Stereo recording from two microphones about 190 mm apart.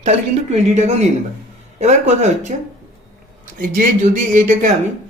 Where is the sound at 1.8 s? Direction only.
35° right (ahead or behind).